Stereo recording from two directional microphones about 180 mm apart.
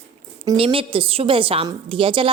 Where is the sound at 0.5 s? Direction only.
30° right (ahead or behind).